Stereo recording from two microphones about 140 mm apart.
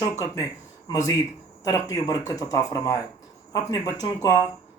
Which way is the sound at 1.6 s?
25° left (ahead or behind).